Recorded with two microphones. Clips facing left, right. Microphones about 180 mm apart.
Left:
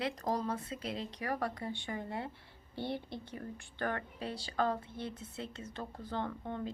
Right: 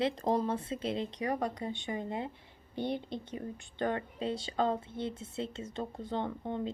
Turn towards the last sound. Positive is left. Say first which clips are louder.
# right 3 dB
turn(degrees=-20)  # may be behind; listen again after turning